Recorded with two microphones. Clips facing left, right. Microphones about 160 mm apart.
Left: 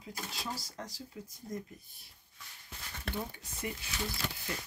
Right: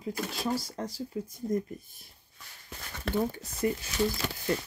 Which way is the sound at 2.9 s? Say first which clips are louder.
Right 8 dB; 90° right.